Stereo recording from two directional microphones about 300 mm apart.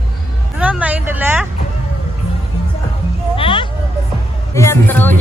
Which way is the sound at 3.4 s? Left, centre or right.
Centre.